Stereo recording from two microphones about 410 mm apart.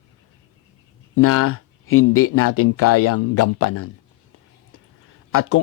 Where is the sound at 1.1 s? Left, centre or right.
Left.